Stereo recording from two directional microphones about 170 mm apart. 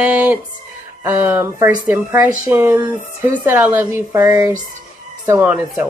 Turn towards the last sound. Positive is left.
turn(degrees=-10)  # may be behind; listen again after turning